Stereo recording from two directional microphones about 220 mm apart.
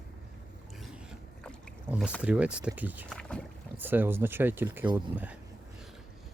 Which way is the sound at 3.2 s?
5° left (ahead or behind).